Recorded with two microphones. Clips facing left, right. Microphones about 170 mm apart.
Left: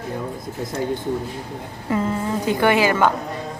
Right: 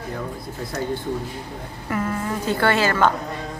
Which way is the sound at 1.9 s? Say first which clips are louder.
Left 3 dB; 20° left (ahead or behind).